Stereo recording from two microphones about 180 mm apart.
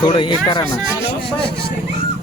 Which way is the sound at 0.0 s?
25° left (ahead or behind).